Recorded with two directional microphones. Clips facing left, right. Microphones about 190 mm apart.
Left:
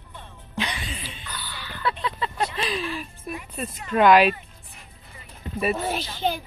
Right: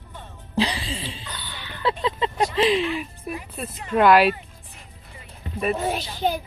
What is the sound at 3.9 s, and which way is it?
Speech, 5° right (ahead or behind).